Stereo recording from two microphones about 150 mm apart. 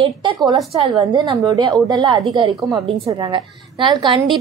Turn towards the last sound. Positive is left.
turn(degrees=-30)  # may be behind; listen again after turning